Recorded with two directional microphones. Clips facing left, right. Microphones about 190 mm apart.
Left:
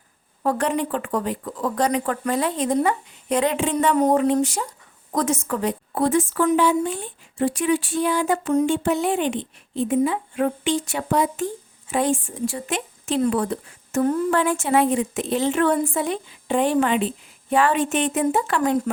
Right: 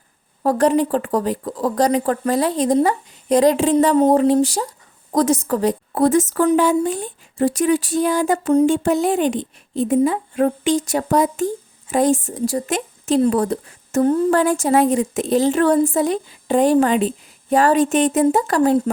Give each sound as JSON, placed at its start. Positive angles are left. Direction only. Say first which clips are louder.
{"t": 0.4, "sound": "speech", "louder": "right 6 dB", "side_deg": -40}